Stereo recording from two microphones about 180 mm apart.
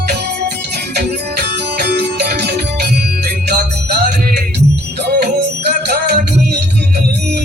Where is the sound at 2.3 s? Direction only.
60° right (ahead or behind).